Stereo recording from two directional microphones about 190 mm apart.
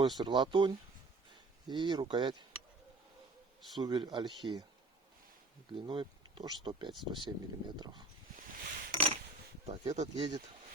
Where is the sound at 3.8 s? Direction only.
20° right (ahead or behind).